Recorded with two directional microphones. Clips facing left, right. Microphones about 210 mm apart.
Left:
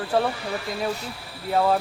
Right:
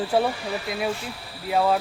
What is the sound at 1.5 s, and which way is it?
Speech, centre (ahead or behind).